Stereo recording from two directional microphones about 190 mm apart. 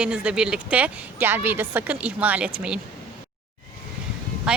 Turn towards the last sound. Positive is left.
turn(degrees=-5)  # may be behind; listen again after turning